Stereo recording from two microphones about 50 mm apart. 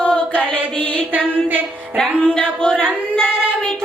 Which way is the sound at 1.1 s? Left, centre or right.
Right.